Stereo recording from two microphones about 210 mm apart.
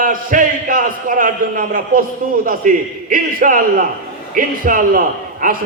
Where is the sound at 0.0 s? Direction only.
40° right (ahead or behind).